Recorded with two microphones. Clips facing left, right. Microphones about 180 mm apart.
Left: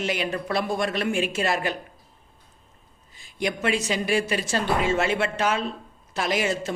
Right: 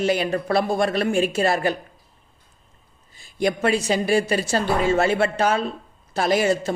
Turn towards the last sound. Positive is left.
turn(degrees=-35)  # may be behind; listen again after turning